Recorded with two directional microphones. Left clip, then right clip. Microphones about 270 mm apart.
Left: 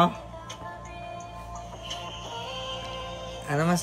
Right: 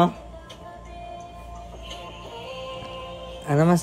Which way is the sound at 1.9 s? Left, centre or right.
Centre.